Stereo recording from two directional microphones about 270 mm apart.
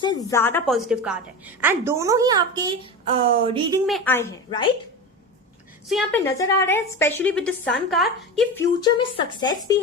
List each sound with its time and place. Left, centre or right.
0.0 s a woman's voice: centre
3.8 s a woman's voice: centre
5.9 s a woman's voice: centre
6.2 s a woman's voice: centre
8.6 s a woman's voice: centre